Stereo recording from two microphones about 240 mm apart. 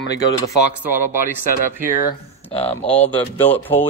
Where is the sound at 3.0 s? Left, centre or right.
Centre.